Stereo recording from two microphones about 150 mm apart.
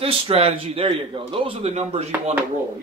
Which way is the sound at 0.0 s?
40° right (ahead or behind).